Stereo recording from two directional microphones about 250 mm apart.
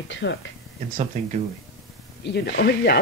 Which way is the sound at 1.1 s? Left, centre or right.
Right.